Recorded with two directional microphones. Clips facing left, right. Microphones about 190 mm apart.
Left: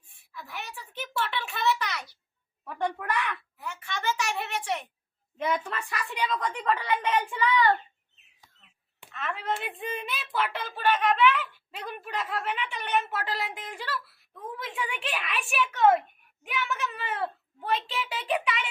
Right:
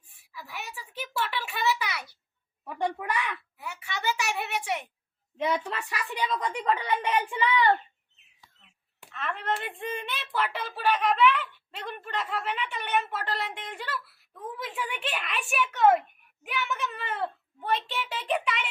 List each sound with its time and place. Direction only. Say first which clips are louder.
0.3 s a sound: even; 5° right (ahead or behind)
5.4 s a woman's voice: right 1 dB; 20° right (ahead or behind)
9.0 s speech: even; centre (ahead or behind)